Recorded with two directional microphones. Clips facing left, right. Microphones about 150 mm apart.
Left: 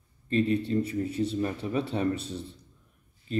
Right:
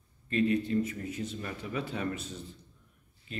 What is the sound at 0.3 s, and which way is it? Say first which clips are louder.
A man's voice: left 2 dB; 30° left (ahead or behind).